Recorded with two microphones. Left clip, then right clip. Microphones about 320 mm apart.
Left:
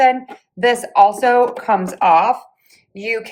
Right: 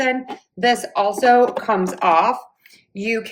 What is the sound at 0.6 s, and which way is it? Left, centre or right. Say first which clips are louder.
A woman's voice: left 6 dB; left.